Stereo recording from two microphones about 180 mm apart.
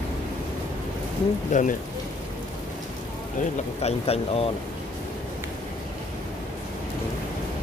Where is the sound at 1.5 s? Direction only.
40° left (ahead or behind).